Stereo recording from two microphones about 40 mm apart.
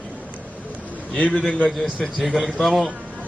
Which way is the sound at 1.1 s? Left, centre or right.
Left.